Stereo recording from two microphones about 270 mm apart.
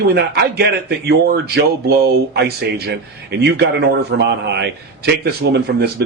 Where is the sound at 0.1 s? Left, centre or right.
Right.